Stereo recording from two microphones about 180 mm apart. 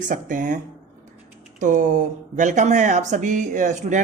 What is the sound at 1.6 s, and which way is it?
A woman's voice, 45° right (ahead or behind).